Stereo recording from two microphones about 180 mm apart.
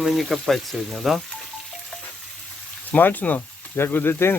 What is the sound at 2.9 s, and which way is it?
Speech, 10° left (ahead or behind).